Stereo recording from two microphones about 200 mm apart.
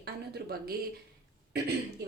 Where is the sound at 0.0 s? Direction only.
55° right (ahead or behind).